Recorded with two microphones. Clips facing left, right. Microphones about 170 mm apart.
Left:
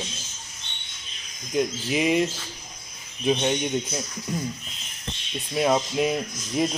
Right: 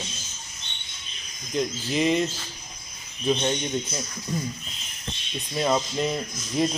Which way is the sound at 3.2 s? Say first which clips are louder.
Left 1 dB; 10° left (ahead or behind).